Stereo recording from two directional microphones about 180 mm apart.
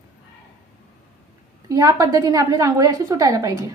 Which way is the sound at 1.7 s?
20° right (ahead or behind).